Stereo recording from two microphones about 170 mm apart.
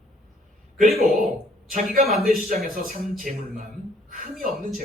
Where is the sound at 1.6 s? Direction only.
55° right (ahead or behind).